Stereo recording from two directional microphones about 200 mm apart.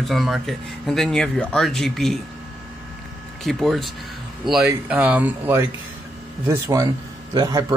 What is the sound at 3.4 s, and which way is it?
Speech, centre (ahead or behind).